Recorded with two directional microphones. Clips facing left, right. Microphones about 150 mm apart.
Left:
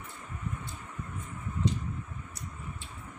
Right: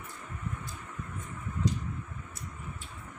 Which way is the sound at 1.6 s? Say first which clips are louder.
Left 1 dB; 25° left (ahead or behind).